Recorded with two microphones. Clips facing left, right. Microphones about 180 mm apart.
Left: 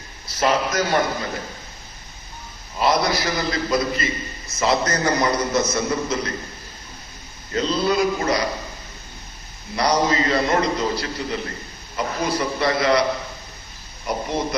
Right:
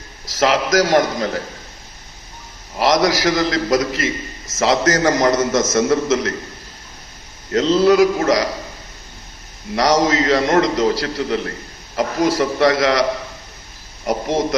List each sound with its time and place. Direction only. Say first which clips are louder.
0.3 s a man's voice: right 4 dB; 90° right
2.7 s a man's voice: right 4 dB; 90° right
7.5 s a man's voice: right 7 dB; 90° right
9.7 s a man's voice: right 4 dB; 90° right; by 11.5 s 70° right (ahead or behind)
11.9 s a man's voice: right 6 dB; 90° right
14.1 s a man's voice: right 5 dB; 90° right